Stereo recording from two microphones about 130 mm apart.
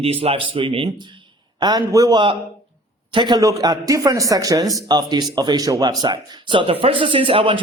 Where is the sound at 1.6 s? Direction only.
30° right (ahead or behind).